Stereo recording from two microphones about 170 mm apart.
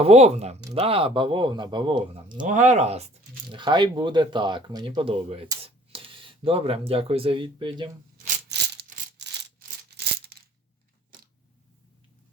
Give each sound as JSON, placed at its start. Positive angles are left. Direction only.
{"t": 0.0, "sound": "speech", "side_deg": -35}
{"t": 2.4, "sound": "speech", "side_deg": -45}
{"t": 3.5, "sound": "speech", "side_deg": -25}
{"t": 8.4, "sound": "a sound", "side_deg": -80}